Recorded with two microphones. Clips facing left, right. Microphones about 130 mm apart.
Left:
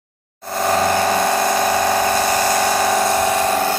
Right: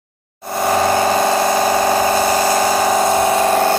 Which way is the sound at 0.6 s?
15° right (ahead or behind).